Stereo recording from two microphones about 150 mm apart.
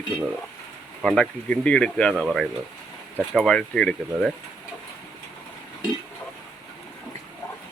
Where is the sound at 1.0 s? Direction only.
5° left (ahead or behind).